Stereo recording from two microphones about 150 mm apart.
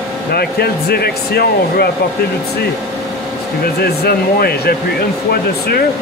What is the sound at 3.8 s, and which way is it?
Speech, 90° left.